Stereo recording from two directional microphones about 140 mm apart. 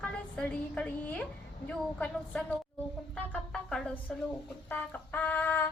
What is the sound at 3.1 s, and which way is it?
Music, 5° left (ahead or behind).